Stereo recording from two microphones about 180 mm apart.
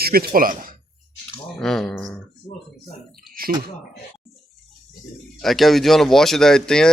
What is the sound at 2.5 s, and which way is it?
Speech, 25° left (ahead or behind).